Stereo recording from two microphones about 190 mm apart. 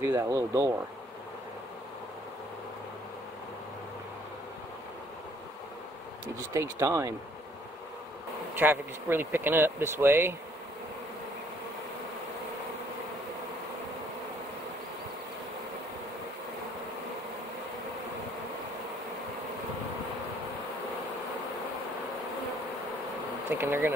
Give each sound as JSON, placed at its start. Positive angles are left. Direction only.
{"t": 0.0, "sound": "speech", "side_deg": -15}
{"t": 6.5, "sound": "speech", "side_deg": -15}
{"t": 8.5, "sound": "speech", "side_deg": -10}
{"t": 23.5, "sound": "speech", "side_deg": -10}